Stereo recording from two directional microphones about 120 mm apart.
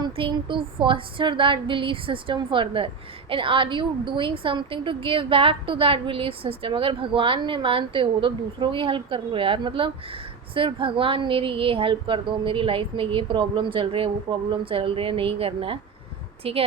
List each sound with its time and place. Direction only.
0.0 s speech: 40° right (ahead or behind)